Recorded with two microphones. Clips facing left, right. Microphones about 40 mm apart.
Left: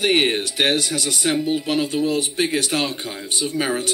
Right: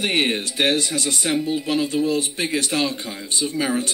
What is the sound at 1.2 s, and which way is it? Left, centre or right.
Speech, left.